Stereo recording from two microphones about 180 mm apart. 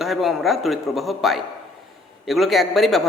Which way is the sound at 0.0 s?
Centre (ahead or behind).